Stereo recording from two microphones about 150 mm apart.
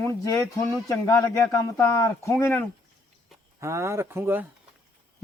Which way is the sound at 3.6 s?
20° right (ahead or behind).